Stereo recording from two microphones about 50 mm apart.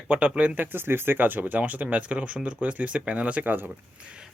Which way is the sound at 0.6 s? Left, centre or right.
Right.